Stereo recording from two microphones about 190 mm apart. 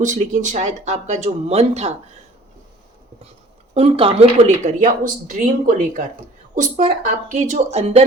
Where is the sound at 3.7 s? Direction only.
30° right (ahead or behind).